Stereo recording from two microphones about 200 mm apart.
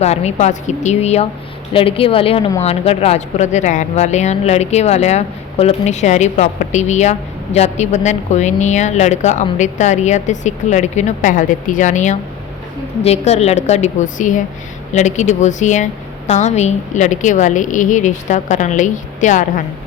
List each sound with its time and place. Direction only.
0.0 s a woman's voice: 35° left (ahead or behind)